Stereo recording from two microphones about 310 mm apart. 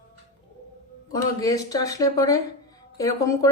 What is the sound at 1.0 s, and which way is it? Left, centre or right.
Speech, centre.